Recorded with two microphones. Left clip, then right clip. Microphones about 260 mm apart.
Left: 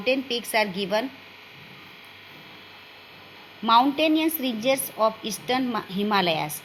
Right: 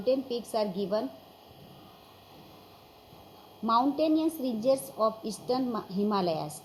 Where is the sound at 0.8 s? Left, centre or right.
Left.